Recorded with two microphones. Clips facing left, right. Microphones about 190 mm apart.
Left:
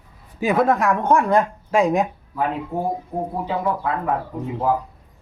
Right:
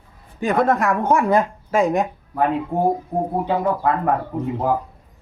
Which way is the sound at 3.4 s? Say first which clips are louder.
Right 3 dB; 60° right (ahead or behind).